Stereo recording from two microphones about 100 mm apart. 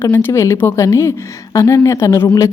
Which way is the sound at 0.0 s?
20° left (ahead or behind).